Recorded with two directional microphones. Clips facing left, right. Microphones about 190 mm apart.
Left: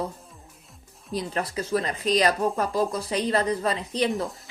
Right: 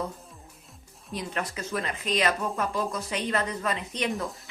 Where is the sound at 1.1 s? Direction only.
35° left (ahead or behind).